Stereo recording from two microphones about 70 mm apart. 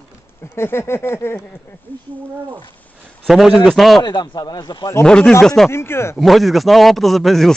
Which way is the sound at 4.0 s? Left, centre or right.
Left.